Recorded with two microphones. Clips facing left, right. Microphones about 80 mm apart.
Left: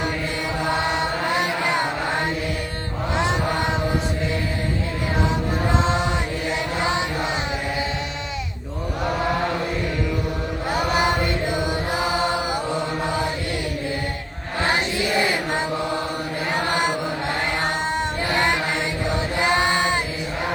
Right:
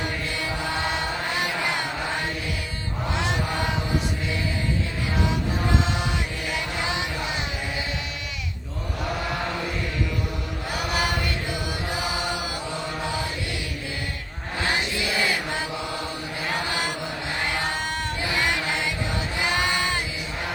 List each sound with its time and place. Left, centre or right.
0.6 s chant: left
5.9 s chant: left
6.7 s a sound: left
10.7 s chant: left
14.6 s chant: left
17.9 s chant: left
19.4 s a sound: left